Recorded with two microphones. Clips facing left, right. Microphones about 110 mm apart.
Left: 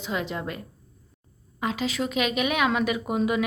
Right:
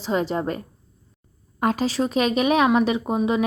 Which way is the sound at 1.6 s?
50° right (ahead or behind).